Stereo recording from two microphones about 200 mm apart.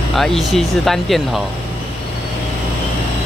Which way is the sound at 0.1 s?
Centre (ahead or behind).